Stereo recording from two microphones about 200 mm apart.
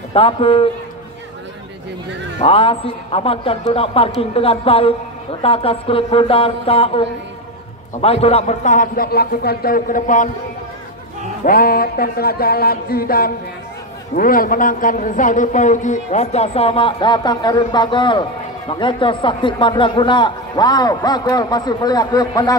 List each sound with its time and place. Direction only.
0.1 s a man's voice: 30° left (ahead or behind)
2.4 s a man's voice: 25° left (ahead or behind)
8.0 s a man's voice: 30° left (ahead or behind)
11.4 s a man's voice: 45° left (ahead or behind); by 22.6 s 20° left (ahead or behind)